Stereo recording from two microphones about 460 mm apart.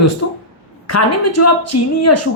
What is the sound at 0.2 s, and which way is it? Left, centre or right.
A woman's voice, left.